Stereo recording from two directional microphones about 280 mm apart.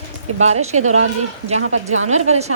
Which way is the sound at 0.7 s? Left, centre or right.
Right.